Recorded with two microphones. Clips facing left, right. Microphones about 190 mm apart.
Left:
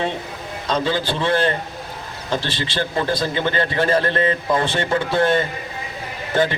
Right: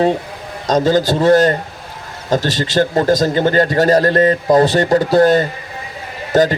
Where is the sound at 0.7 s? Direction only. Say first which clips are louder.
Right 8 dB; 40° right (ahead or behind).